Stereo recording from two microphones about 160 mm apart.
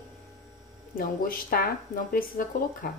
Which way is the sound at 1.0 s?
65° left (ahead or behind).